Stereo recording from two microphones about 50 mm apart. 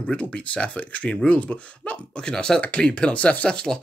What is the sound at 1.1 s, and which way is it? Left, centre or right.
Speech, centre.